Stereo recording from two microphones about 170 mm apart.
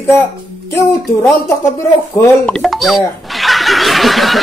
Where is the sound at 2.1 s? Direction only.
5° left (ahead or behind).